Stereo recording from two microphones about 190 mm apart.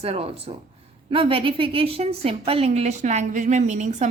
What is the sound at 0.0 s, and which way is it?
A woman's voice, 30° right (ahead or behind).